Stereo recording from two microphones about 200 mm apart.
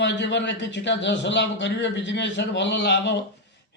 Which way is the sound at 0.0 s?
60° left (ahead or behind).